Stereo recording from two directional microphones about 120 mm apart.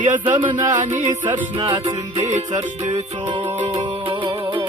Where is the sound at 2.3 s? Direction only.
80° right.